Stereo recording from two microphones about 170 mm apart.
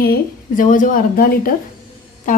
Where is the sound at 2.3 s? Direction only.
50° left (ahead or behind).